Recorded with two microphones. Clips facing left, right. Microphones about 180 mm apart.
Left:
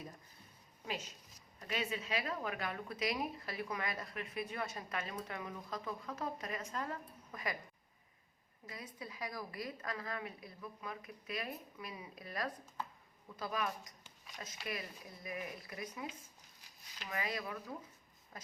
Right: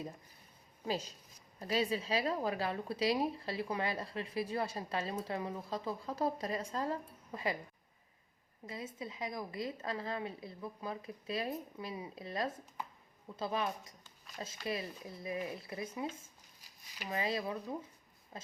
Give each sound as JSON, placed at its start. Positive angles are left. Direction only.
{"t": 0.9, "sound": "speech", "side_deg": -35}
{"t": 8.6, "sound": "a woman's voice", "side_deg": -25}
{"t": 17.1, "sound": "a woman's voice", "side_deg": -25}